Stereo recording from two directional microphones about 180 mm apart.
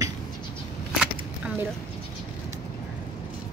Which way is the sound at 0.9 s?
5° right (ahead or behind).